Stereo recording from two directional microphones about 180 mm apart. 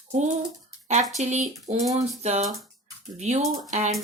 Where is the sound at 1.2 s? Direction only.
40° right (ahead or behind).